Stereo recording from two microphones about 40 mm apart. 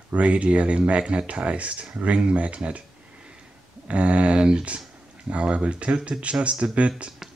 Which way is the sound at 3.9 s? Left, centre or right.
Right.